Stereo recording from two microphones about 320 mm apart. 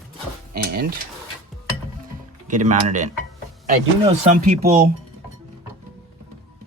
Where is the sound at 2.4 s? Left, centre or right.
Right.